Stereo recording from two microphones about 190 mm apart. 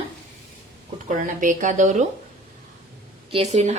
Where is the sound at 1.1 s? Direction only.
45° right (ahead or behind).